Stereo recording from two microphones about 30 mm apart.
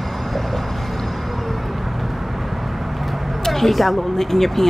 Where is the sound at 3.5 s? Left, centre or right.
Centre.